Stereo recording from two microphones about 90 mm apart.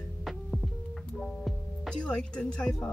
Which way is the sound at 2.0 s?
10° left (ahead or behind).